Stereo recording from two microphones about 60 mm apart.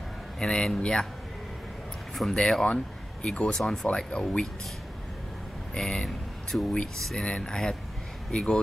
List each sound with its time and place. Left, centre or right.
0.4 s speech: centre
2.3 s speech: centre
5.8 s speech: centre
7.2 s speech: centre